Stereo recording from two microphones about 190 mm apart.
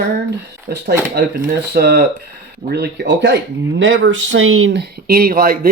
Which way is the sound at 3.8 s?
85° right.